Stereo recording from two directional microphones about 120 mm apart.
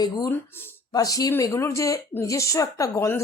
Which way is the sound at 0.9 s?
30° left (ahead or behind).